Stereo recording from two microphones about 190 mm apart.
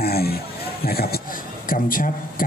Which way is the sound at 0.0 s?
55° left (ahead or behind).